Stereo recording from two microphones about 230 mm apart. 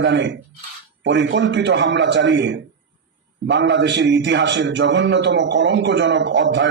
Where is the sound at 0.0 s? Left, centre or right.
Right.